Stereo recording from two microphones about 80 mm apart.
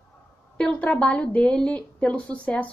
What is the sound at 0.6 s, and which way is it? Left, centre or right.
A woman's voice, centre.